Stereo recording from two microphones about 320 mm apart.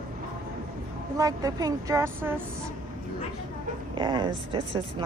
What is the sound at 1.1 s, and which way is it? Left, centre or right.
Speech, centre.